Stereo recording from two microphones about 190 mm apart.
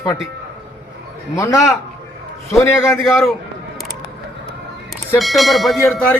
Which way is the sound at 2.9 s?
Centre (ahead or behind).